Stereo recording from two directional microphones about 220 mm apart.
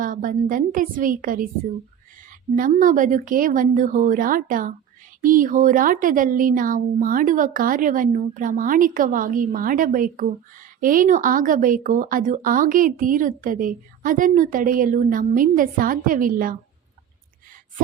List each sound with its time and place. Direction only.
0.0 s speech: 35° right (ahead or behind)
2.6 s speech: 35° right (ahead or behind)